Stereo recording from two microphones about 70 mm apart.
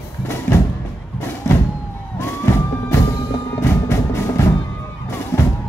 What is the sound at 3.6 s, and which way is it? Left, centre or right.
Music, left.